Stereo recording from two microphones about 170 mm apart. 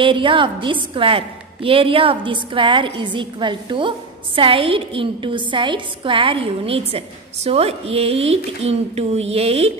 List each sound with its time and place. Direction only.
0.0 s a woman's voice: 30° right (ahead or behind)